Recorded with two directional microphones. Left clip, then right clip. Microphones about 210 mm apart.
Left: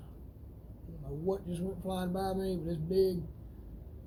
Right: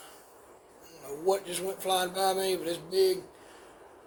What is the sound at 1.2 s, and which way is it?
Speech, 20° right (ahead or behind).